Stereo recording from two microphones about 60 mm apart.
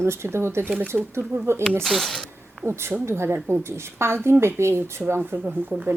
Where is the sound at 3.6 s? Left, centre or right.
Right.